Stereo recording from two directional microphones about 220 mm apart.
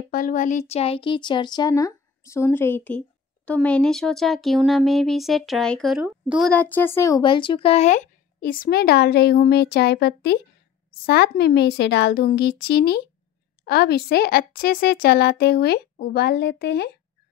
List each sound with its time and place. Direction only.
0.1 s a woman's voice: 35° left (ahead or behind)